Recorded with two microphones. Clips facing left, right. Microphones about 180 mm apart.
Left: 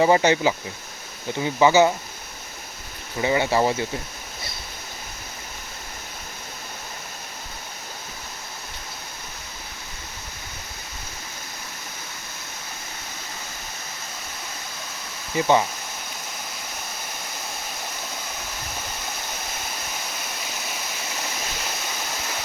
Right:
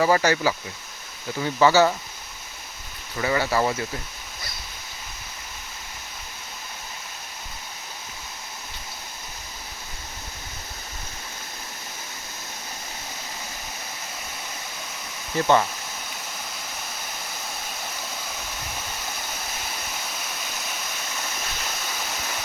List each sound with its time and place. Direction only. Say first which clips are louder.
0.0 s speech: left 2 dB; 20° left (ahead or behind)
3.2 s speech: left 2 dB; 20° left (ahead or behind)
15.4 s speech: even; 15° left (ahead or behind)